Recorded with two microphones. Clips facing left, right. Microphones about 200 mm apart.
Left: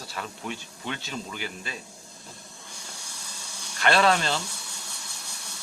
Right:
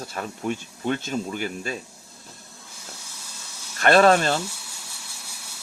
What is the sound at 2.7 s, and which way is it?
Hiss, 5° right (ahead or behind).